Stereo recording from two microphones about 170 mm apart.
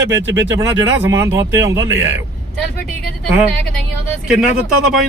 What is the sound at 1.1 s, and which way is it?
Speech, 15° right (ahead or behind).